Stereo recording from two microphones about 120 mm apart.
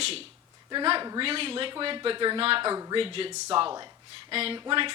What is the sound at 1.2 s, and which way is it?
Speech, 50° right (ahead or behind).